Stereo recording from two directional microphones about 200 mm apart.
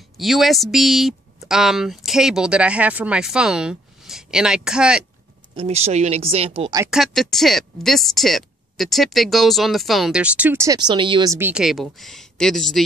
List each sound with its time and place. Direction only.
0.2 s speech: centre (ahead or behind)
5.6 s speech: 30° right (ahead or behind)
6.9 s speech: centre (ahead or behind); by 11.3 s 25° right (ahead or behind)
11.3 s speech: 5° right (ahead or behind)